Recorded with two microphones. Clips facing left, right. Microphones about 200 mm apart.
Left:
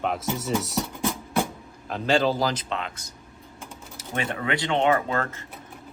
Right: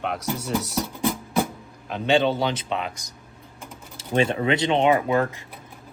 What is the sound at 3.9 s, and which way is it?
Speech, 25° right (ahead or behind).